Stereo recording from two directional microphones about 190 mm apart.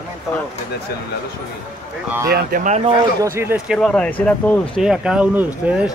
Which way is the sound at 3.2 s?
15° right (ahead or behind).